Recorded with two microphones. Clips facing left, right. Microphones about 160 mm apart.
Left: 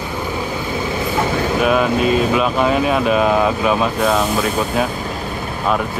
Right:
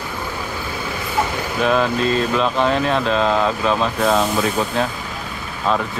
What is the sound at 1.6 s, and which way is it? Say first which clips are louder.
Speech: left 1 dB; 10° left (ahead or behind).